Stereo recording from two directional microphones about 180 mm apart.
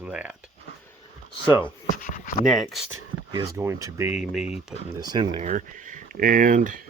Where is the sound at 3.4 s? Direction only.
15° right (ahead or behind).